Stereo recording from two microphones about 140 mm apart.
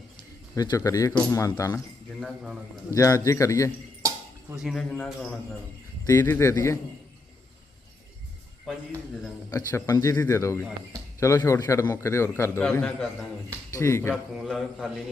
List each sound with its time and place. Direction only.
0.5 s a man's voice: 25° left (ahead or behind)
2.2 s a man's voice: 5° right (ahead or behind)
2.9 s a man's voice: 20° left (ahead or behind)
4.5 s a man's voice: centre (ahead or behind)
6.1 s speech: 15° left (ahead or behind)
9.5 s a man's voice: 25° left (ahead or behind)
14.1 s a man's voice: centre (ahead or behind)